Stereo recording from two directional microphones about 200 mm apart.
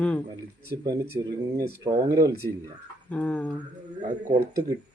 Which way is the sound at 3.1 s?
5° left (ahead or behind).